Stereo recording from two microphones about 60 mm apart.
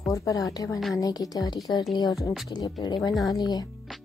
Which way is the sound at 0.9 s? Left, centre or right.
Left.